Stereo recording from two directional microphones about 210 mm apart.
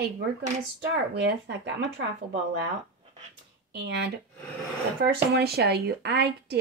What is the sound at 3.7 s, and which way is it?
Speech, 55° right (ahead or behind).